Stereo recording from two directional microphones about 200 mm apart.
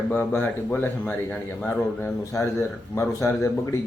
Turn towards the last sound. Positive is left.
turn(degrees=15)  # may be behind; listen again after turning